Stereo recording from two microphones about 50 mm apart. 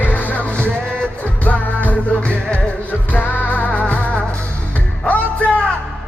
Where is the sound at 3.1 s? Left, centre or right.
Left.